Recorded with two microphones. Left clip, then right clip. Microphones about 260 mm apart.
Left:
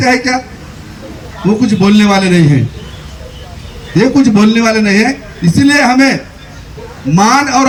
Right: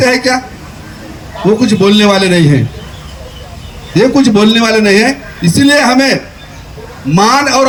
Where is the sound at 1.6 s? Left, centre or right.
Right.